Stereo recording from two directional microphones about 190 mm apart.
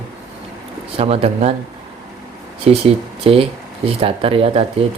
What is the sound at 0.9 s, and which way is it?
Speech, 30° right (ahead or behind).